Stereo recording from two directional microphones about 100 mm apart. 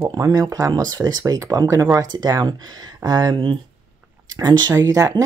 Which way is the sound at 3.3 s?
55° right (ahead or behind).